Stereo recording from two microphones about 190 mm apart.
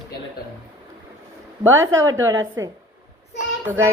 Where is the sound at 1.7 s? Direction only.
15° right (ahead or behind).